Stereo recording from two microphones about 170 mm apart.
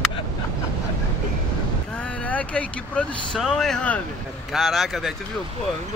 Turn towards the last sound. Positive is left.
turn(degrees=0)  # may be behind; listen again after turning